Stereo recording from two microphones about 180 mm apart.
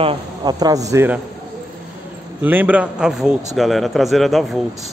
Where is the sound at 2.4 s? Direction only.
10° right (ahead or behind).